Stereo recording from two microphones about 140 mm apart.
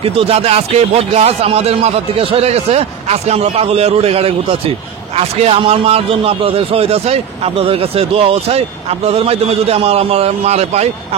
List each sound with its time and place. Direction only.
0.0 s speech: 40° right (ahead or behind)